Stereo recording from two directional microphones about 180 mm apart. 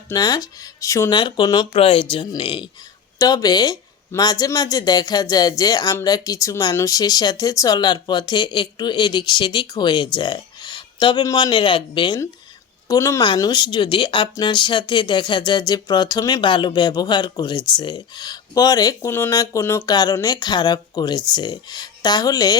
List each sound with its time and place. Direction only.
0.1 s speech: 20° left (ahead or behind)